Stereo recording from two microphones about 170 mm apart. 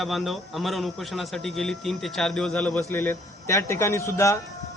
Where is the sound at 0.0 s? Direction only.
Centre (ahead or behind).